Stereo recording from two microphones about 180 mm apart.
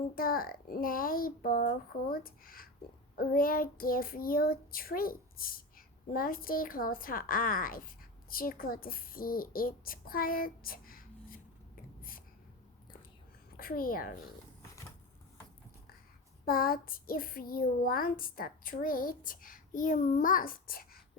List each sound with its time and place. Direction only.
0.2 s child singing: 55° left (ahead or behind)
13.6 s child singing: 55° left (ahead or behind)
16.5 s child singing: 55° left (ahead or behind)